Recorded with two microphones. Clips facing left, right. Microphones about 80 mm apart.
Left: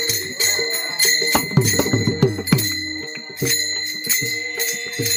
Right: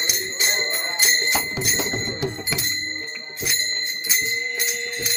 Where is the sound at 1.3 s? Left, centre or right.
Left.